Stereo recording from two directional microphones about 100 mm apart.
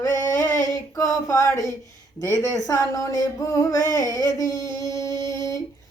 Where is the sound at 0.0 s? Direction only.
30° left (ahead or behind).